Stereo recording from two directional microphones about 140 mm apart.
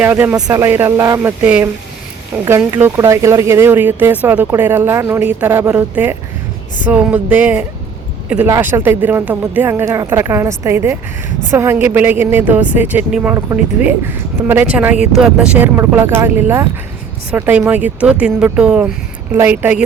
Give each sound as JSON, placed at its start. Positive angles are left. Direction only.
{"t": 0.0, "sound": "speech", "side_deg": -10}
{"t": 0.3, "sound": "speech", "side_deg": -25}
{"t": 1.4, "sound": "speech", "side_deg": -10}
{"t": 14.4, "sound": "speech", "side_deg": -15}